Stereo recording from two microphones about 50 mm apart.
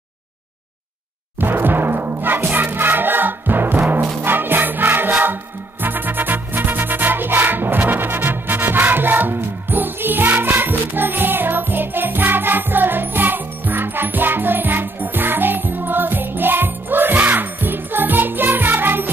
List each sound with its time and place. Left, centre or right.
1.4 s timpani: right
4.2 s music: right